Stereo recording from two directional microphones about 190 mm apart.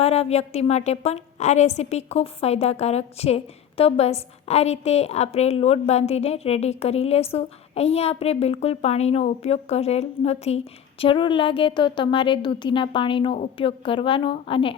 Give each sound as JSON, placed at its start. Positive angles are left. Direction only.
{"t": 0.0, "sound": "a woman's voice", "side_deg": 35}